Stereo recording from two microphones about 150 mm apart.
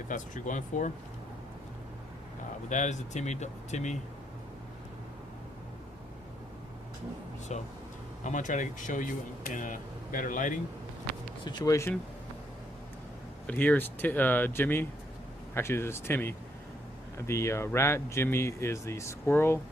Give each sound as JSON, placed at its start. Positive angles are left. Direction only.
{"t": 0.1, "sound": "speech", "side_deg": 60}
{"t": 2.6, "sound": "speech", "side_deg": 55}
{"t": 7.5, "sound": "speech", "side_deg": 50}
{"t": 11.4, "sound": "speech", "side_deg": 25}
{"t": 13.5, "sound": "speech", "side_deg": 10}